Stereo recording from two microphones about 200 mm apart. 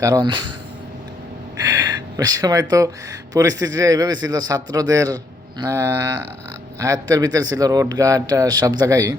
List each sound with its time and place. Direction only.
0.0 s speech: 20° right (ahead or behind)
2.1 s speech: 20° right (ahead or behind)